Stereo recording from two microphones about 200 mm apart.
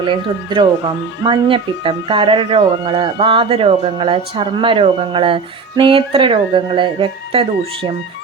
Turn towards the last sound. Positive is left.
turn(degrees=-25)  # may be behind; listen again after turning